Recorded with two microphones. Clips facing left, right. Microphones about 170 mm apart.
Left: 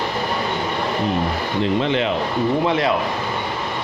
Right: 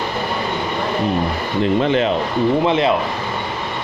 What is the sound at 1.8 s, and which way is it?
Speech, 45° right (ahead or behind).